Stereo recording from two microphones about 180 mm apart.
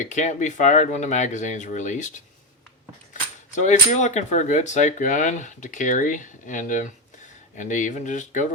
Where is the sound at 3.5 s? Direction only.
40° left (ahead or behind).